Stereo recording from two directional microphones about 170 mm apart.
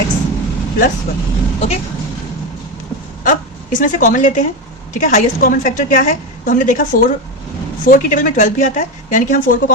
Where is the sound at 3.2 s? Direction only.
50° left (ahead or behind).